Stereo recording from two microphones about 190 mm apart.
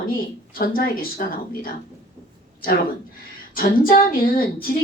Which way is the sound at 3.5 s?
50° left (ahead or behind).